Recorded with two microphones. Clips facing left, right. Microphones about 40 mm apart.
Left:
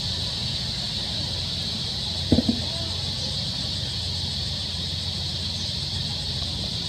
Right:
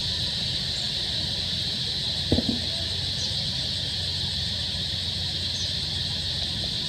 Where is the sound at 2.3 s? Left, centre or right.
Centre.